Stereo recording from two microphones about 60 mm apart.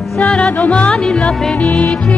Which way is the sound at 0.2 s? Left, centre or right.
Centre.